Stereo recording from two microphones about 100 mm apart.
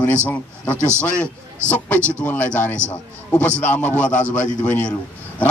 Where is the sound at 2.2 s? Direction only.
15° left (ahead or behind).